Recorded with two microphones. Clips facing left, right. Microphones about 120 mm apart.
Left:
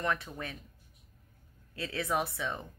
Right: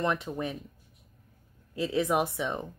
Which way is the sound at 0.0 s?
20° right (ahead or behind).